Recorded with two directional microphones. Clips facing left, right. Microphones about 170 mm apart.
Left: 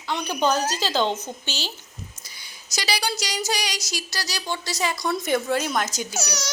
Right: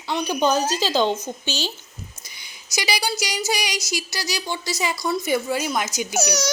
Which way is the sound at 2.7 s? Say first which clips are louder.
Right 2 dB; 10° right (ahead or behind).